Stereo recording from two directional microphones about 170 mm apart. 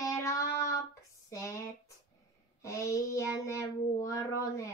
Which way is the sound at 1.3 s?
20° left (ahead or behind).